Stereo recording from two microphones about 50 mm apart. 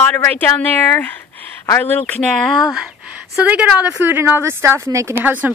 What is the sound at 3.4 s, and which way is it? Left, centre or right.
Speech, right.